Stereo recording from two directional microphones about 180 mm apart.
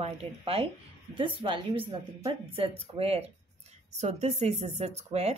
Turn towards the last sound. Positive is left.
turn(degrees=-35)  # may be behind; listen again after turning